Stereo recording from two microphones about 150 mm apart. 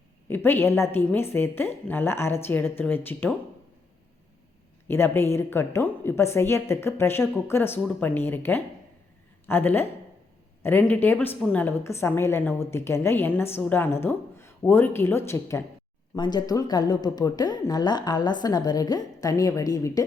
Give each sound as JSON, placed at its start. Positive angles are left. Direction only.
{"t": 0.3, "sound": "a woman's voice", "side_deg": 15}
{"t": 4.9, "sound": "a woman's voice", "side_deg": 15}
{"t": 16.1, "sound": "a woman's voice", "side_deg": 30}